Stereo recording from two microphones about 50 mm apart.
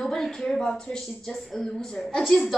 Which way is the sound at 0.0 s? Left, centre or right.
Centre.